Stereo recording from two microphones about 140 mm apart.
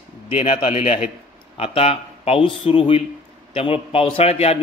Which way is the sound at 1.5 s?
45° left (ahead or behind).